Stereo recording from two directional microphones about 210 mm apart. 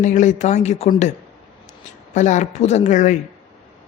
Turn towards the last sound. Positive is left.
turn(degrees=35)  # may be behind; listen again after turning